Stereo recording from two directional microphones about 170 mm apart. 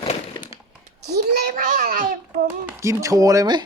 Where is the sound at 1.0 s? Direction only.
70° right (ahead or behind).